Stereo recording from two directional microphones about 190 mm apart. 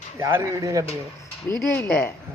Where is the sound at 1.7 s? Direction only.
10° left (ahead or behind).